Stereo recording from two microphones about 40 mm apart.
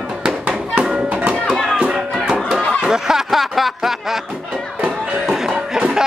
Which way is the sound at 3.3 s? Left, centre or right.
Centre.